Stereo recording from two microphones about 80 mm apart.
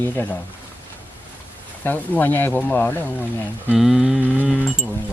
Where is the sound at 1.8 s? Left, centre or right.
Left.